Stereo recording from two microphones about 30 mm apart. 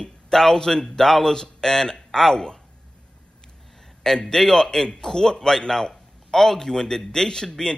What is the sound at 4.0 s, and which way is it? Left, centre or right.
A man's voice, centre.